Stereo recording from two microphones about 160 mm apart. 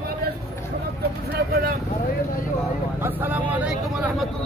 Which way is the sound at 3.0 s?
10° right (ahead or behind).